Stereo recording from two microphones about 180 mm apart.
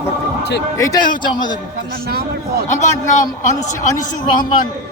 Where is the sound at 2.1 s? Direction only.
60° right (ahead or behind).